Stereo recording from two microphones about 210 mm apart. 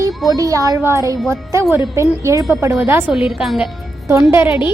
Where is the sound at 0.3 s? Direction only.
15° right (ahead or behind).